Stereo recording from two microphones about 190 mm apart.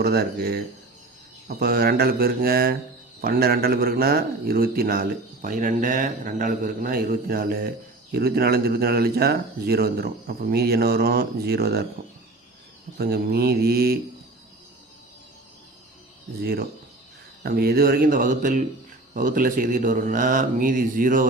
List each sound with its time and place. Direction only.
0.0 s a man's voice: 55° right (ahead or behind)
13.0 s a man's voice: 55° right (ahead or behind)
16.4 s a man's voice: 55° right (ahead or behind)